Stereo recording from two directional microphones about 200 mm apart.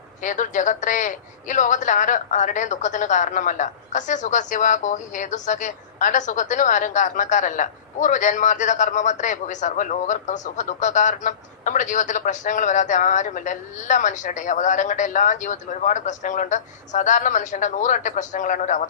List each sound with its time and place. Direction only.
0.2 s speech: 40° left (ahead or behind)